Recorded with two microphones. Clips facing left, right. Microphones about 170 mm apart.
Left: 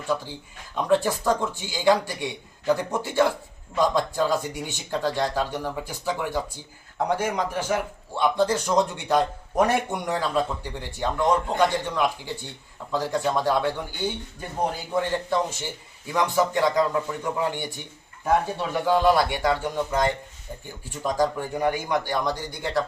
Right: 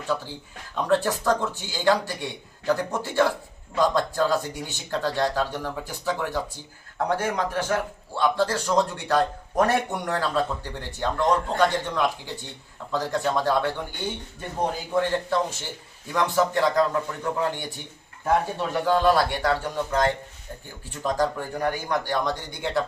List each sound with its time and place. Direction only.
0.1 s a man's voice: 5° left (ahead or behind)